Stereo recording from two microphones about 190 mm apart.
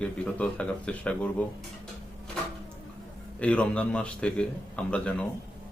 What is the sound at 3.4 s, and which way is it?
A man's voice, 5° left (ahead or behind).